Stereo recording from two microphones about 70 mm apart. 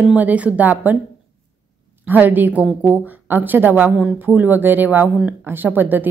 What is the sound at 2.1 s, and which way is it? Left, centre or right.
Speech, right.